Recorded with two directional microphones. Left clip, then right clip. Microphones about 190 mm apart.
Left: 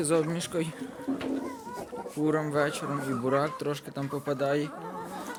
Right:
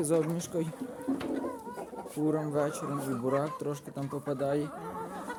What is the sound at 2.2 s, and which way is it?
Speech, centre (ahead or behind).